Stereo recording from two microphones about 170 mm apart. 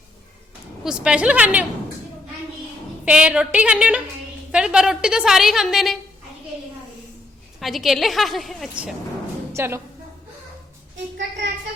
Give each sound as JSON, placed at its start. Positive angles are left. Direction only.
{"t": 0.9, "sound": "a woman's voice", "side_deg": -5}
{"t": 3.0, "sound": "a woman's voice", "side_deg": -5}
{"t": 7.6, "sound": "a woman's voice", "side_deg": 0}
{"t": 9.5, "sound": "a woman's voice", "side_deg": -15}